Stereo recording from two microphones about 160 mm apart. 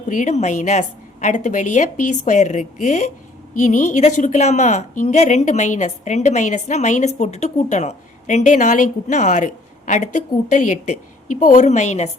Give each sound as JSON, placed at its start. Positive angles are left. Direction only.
{"t": 0.1, "sound": "a woman's voice", "side_deg": 50}